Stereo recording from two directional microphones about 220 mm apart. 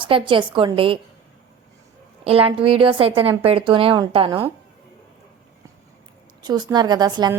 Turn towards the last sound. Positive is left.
turn(degrees=-20)  # may be behind; listen again after turning